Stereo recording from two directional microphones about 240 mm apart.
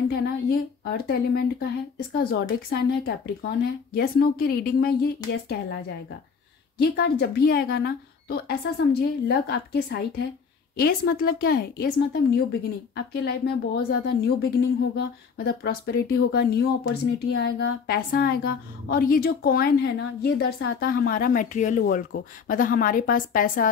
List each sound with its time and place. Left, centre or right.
0.1 s a woman's voice: left
2.7 s a woman's voice: left